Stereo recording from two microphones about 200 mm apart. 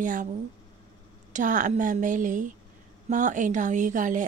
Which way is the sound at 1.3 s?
40° right (ahead or behind).